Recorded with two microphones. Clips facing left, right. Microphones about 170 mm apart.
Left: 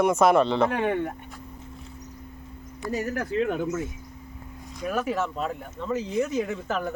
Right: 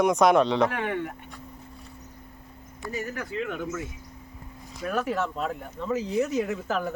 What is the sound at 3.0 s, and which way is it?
Speech, 35° left (ahead or behind).